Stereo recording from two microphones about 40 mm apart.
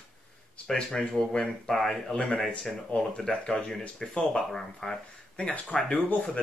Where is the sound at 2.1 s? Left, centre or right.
Left; by 5.0 s centre.